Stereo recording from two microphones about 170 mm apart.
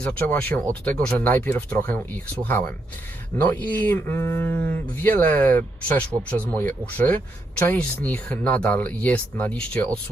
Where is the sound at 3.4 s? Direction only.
10° left (ahead or behind).